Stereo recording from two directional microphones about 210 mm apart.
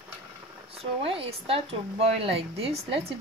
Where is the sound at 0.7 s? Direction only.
25° right (ahead or behind).